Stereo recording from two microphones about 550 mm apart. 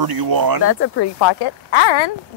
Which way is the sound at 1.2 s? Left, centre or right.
Left.